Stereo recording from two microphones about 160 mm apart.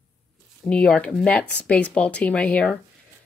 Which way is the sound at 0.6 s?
5° left (ahead or behind).